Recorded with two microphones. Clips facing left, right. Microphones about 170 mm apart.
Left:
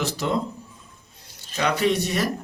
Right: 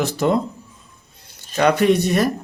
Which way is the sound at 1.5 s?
55° right (ahead or behind).